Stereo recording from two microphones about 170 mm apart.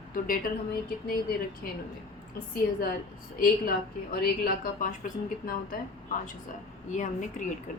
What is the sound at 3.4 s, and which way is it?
A woman's voice, 65° left (ahead or behind).